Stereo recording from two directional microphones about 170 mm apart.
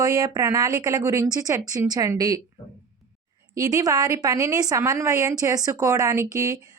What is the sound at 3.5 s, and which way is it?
A woman's voice, 20° right (ahead or behind).